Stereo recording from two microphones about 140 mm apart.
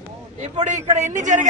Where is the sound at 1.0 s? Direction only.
60° right (ahead or behind).